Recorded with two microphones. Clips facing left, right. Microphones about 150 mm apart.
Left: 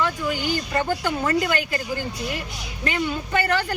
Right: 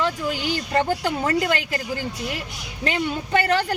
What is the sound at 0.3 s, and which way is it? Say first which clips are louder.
A woman's voice: even; 35° right (ahead or behind).